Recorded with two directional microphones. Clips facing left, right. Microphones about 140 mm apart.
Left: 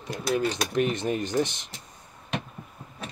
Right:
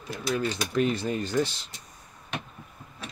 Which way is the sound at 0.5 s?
20° left (ahead or behind).